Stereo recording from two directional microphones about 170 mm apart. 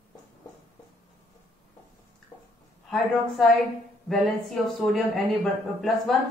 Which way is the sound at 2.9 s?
Centre (ahead or behind).